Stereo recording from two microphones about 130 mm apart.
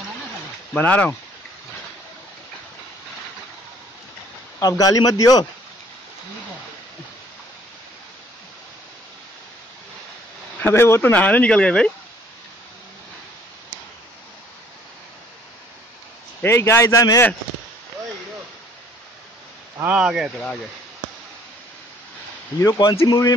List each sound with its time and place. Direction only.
0.7 s speech: 10° left (ahead or behind)
4.6 s speech: 30° left (ahead or behind)
10.6 s speech: 20° left (ahead or behind)
16.3 s speech: 20° left (ahead or behind)
19.8 s speech: 10° right (ahead or behind)
22.6 s speech: 30° left (ahead or behind)